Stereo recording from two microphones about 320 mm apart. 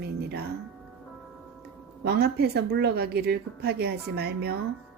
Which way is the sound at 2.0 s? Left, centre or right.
Right.